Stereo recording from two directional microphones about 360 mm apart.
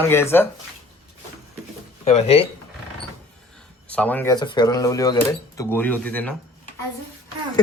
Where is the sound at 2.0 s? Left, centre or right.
Centre.